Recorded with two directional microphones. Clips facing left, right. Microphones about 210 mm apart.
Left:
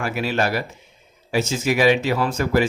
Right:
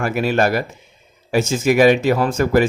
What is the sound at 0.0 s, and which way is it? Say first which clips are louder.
Speech: right 5 dB; 50° right (ahead or behind).